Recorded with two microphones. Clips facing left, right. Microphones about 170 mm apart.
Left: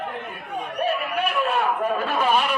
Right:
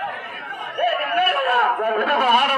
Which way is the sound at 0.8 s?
60° right (ahead or behind).